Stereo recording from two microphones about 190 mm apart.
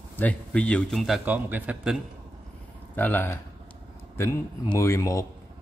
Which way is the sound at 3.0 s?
10° left (ahead or behind).